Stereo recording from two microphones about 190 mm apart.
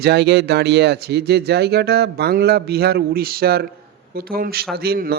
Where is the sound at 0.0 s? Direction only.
60° right (ahead or behind).